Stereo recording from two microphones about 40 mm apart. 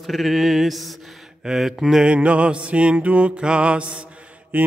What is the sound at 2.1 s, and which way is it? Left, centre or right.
Mantra, right.